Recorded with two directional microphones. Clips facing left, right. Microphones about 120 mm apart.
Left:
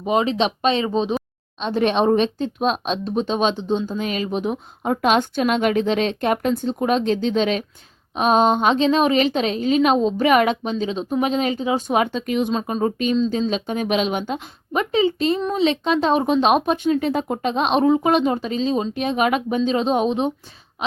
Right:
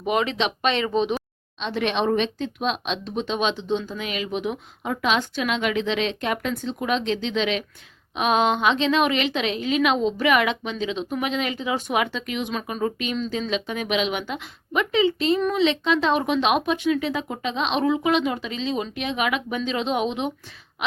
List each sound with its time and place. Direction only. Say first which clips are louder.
0.0 s a woman's voice: left 4 dB; 30° left (ahead or behind)
12.5 s speech: left 5 dB; 30° left (ahead or behind)